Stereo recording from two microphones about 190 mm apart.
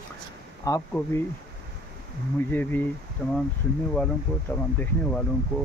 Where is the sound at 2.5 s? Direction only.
10° left (ahead or behind).